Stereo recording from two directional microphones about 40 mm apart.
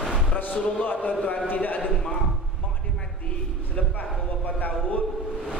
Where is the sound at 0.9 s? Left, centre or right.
Left.